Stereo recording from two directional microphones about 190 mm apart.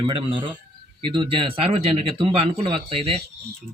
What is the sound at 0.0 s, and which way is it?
Speech, 25° right (ahead or behind).